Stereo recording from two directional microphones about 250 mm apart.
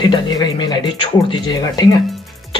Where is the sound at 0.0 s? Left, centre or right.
Centre.